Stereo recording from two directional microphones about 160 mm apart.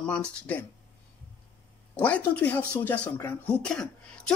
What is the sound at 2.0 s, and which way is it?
Speech, 10° left (ahead or behind).